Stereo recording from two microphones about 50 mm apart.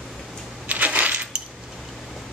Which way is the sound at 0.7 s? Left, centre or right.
Right.